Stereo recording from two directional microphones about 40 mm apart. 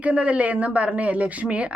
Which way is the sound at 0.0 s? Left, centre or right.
Right.